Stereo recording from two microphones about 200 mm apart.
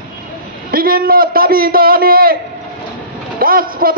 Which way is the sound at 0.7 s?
45° right (ahead or behind).